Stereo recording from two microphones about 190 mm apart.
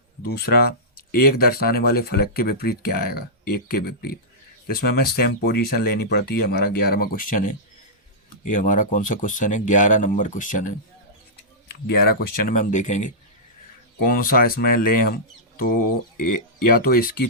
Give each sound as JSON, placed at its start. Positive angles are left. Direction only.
{"t": 0.2, "sound": "speech", "side_deg": 55}
{"t": 8.5, "sound": "speech", "side_deg": 45}
{"t": 11.7, "sound": "speech", "side_deg": 55}
{"t": 14.0, "sound": "speech", "side_deg": 50}